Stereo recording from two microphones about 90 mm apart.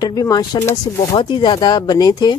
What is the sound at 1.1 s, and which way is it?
Speech, 60° left (ahead or behind).